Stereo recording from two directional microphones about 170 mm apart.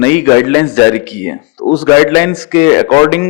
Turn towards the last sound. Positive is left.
turn(degrees=20)  # may be behind; listen again after turning